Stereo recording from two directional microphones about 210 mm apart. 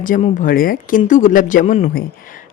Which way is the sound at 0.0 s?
40° left (ahead or behind).